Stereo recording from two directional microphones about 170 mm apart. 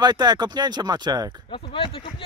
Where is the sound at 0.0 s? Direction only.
25° right (ahead or behind).